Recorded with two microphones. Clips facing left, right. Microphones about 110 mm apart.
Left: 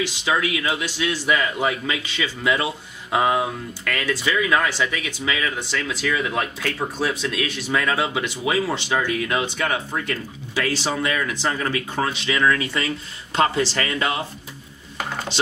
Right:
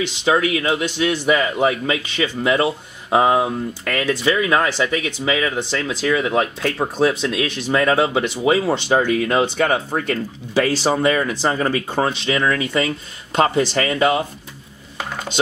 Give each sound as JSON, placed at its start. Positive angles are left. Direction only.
{"t": 0.2, "sound": "speech", "side_deg": -30}
{"t": 0.8, "sound": "a man's voice", "side_deg": -20}
{"t": 8.9, "sound": "speech", "side_deg": -40}
{"t": 12.1, "sound": "a man's voice", "side_deg": -25}